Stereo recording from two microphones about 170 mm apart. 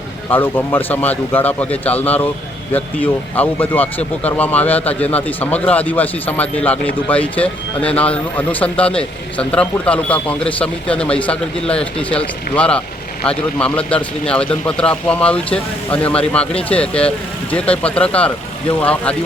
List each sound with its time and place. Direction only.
0.3 s speech: 10° left (ahead or behind)